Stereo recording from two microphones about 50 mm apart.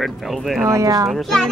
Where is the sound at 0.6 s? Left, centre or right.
Right.